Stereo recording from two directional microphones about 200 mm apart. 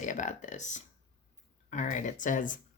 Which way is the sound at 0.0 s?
40° left (ahead or behind).